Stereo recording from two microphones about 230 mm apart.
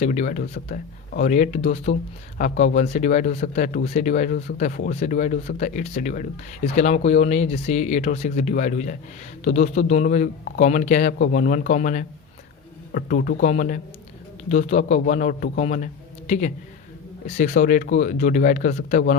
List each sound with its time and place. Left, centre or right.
0.0 s speech: left